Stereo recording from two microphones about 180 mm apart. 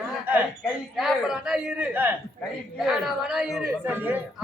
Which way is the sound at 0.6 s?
Centre (ahead or behind).